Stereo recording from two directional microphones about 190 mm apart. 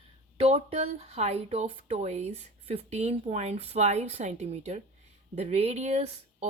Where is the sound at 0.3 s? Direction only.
35° right (ahead or behind).